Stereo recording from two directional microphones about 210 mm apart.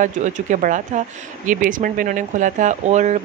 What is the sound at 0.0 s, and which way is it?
Speech, 35° right (ahead or behind).